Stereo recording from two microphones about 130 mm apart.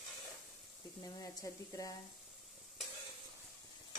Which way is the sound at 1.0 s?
30° left (ahead or behind).